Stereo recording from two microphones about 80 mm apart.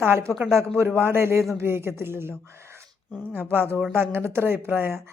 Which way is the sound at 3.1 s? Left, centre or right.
Left.